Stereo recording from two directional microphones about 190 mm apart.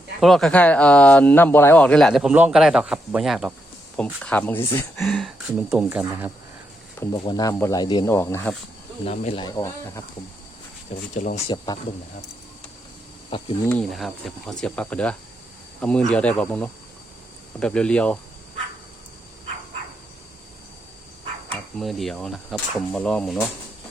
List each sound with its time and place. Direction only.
0.2 s speech: centre (ahead or behind)
4.9 s speech: centre (ahead or behind)
7.1 s speech: 20° left (ahead or behind)
9.0 s speech: 30° left (ahead or behind)
11.1 s speech: 35° left (ahead or behind)
11.5 s speech: 20° left (ahead or behind)
13.3 s speech: 25° left (ahead or behind)
13.7 s speech: 5° left (ahead or behind)
21.5 s speech: centre (ahead or behind)